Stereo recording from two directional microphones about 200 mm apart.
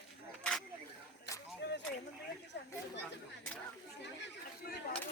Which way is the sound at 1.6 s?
60° left (ahead or behind).